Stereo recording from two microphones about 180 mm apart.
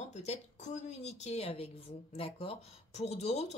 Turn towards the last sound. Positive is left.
turn(degrees=35)  # may be behind; listen again after turning